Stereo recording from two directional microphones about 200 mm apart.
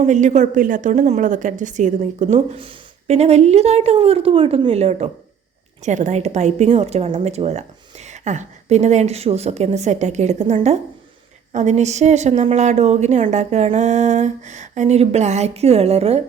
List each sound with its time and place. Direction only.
0.0 s a woman's voice: 35° right (ahead or behind)